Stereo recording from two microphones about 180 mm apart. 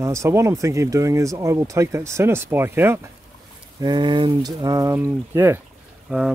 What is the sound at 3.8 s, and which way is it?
Speech, 25° right (ahead or behind).